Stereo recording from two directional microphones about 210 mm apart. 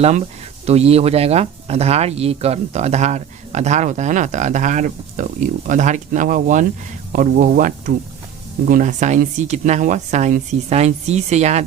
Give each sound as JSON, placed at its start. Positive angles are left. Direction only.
{"t": 0.6, "sound": "speech", "side_deg": -30}